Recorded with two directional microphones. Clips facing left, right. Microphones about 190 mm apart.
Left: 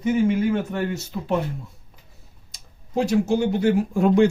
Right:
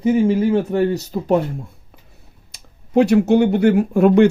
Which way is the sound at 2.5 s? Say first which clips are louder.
Right 5 dB; 65° right (ahead or behind).